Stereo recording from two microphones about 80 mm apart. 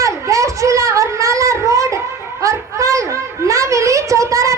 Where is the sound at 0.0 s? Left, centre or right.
Right.